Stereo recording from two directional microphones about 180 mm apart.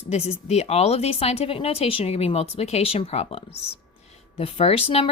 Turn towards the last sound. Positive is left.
turn(degrees=30)  # may be behind; listen again after turning